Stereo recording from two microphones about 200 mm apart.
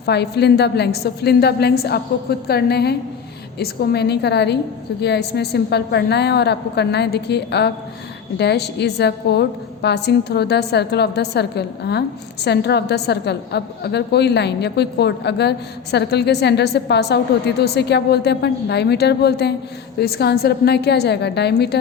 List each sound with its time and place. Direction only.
0.0 s a woman's voice: 55° left (ahead or behind)